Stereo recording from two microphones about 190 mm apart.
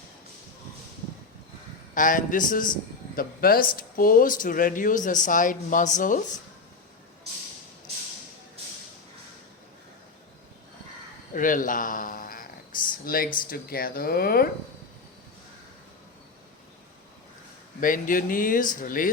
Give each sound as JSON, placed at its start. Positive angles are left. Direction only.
{"t": 2.0, "sound": "speech", "side_deg": 45}
{"t": 11.3, "sound": "speech", "side_deg": 45}
{"t": 17.7, "sound": "speech", "side_deg": 45}